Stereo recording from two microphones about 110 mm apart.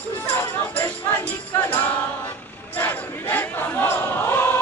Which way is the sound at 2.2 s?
15° left (ahead or behind).